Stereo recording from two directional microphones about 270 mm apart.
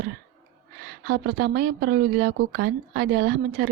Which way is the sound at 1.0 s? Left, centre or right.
Right.